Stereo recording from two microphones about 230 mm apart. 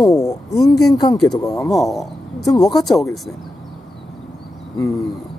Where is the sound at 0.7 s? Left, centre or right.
Centre.